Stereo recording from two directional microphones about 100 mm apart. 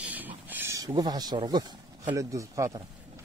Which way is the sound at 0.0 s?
15° right (ahead or behind).